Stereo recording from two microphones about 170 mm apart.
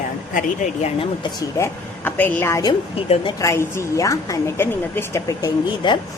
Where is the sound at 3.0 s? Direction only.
35° left (ahead or behind).